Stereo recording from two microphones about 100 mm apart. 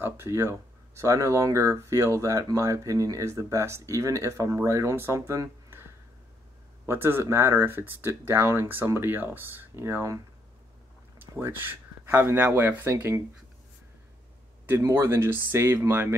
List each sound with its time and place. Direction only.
0.0 s speech: 25° right (ahead or behind)
6.9 s speech: 25° right (ahead or behind)
14.8 s speech: 30° right (ahead or behind)